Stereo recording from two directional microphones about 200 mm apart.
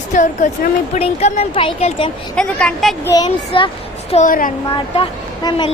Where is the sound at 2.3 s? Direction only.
5° left (ahead or behind).